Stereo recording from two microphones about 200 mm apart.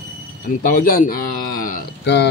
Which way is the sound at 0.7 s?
45° left (ahead or behind).